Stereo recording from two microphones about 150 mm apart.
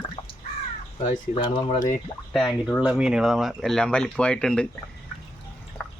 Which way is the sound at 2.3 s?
Centre (ahead or behind).